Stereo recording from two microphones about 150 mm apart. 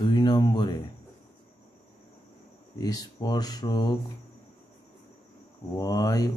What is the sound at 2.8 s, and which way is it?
Speech, 25° left (ahead or behind).